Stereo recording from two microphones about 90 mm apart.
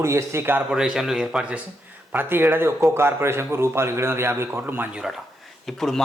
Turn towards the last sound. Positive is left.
turn(degrees=5)  # may be behind; listen again after turning